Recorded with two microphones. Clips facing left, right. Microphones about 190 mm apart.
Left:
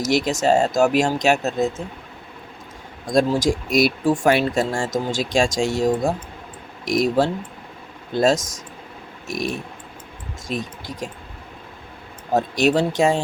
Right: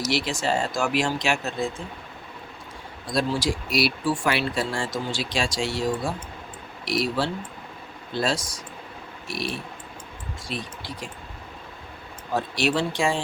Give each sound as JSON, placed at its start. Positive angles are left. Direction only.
{"t": 0.1, "sound": "speech", "side_deg": 45}
{"t": 3.1, "sound": "speech", "side_deg": 45}
{"t": 12.3, "sound": "speech", "side_deg": 45}